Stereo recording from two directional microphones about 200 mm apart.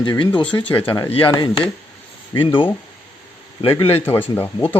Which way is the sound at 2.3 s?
25° left (ahead or behind).